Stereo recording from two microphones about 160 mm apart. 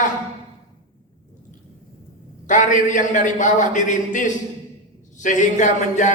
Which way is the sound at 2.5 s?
50° left (ahead or behind).